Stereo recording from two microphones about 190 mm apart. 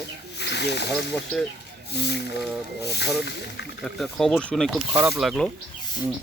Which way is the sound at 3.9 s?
Centre (ahead or behind).